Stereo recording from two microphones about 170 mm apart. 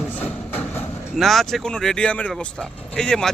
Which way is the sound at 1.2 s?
Centre (ahead or behind).